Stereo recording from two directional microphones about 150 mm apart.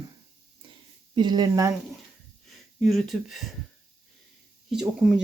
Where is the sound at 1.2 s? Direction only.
30° right (ahead or behind).